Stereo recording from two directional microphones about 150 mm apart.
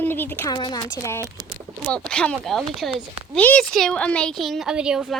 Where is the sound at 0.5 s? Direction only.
25° left (ahead or behind).